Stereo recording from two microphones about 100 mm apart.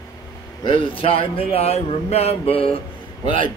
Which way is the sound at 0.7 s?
65° left (ahead or behind).